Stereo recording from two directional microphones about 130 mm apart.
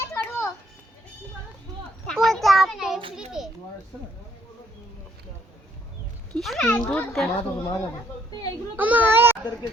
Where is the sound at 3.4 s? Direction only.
5° right (ahead or behind).